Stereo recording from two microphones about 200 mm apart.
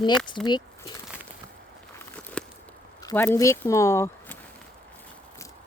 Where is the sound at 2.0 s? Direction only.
10° left (ahead or behind).